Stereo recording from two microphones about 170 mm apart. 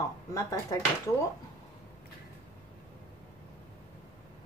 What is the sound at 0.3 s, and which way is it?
Speech, 20° left (ahead or behind).